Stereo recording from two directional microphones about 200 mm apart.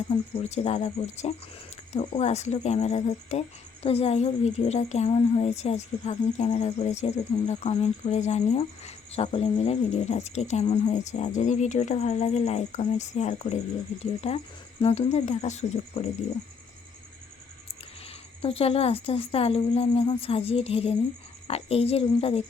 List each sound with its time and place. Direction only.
0.1 s a woman's voice: 35° left (ahead or behind)
18.4 s speech: 30° left (ahead or behind)